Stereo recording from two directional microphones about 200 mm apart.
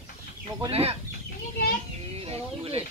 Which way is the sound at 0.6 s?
30° right (ahead or behind).